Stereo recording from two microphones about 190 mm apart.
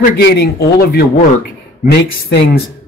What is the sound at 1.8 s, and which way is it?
Speech, 55° left (ahead or behind).